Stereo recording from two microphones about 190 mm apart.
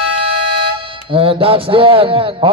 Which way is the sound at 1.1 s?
30° right (ahead or behind).